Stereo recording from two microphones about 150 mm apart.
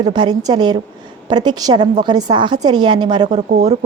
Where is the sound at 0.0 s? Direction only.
30° right (ahead or behind).